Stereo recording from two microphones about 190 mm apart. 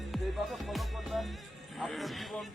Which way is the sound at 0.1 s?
Centre (ahead or behind).